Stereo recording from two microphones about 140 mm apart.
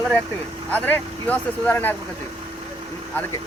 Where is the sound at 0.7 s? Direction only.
10° left (ahead or behind).